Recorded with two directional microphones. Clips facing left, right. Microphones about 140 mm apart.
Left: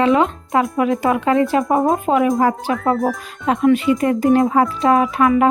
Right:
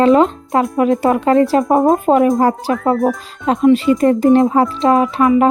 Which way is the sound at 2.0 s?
40° right (ahead or behind).